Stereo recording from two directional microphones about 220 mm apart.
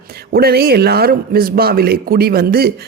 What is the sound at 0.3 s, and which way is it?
Speech, 45° right (ahead or behind).